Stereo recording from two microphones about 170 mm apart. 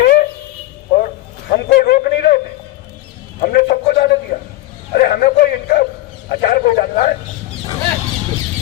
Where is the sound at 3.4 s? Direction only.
55° left (ahead or behind).